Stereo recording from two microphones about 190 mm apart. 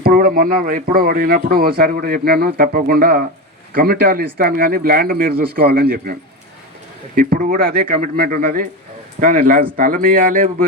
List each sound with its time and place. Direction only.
0.0 s speech: 50° right (ahead or behind)
7.2 s speech: 50° right (ahead or behind)